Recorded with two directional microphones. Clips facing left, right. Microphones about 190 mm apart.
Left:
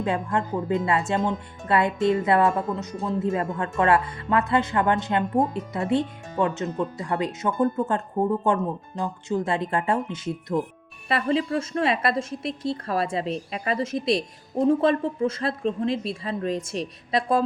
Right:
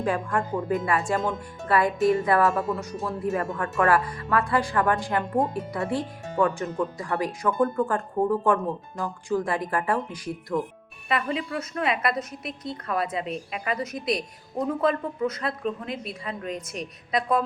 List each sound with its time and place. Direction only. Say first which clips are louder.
0.0 s speech: left 1 dB; 20° left (ahead or behind)